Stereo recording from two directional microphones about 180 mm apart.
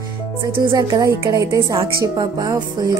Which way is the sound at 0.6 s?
20° right (ahead or behind).